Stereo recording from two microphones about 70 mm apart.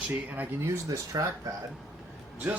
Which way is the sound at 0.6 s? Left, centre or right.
Right.